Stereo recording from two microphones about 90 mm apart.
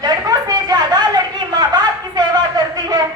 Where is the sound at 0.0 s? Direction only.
45° right (ahead or behind).